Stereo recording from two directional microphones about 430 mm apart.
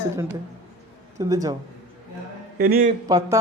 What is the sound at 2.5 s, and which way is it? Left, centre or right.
Speech, right.